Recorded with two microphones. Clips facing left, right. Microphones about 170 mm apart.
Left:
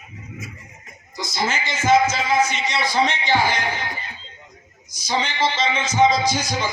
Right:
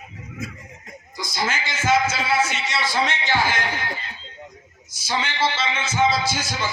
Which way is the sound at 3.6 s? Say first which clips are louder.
Left 1 dB; 15° left (ahead or behind).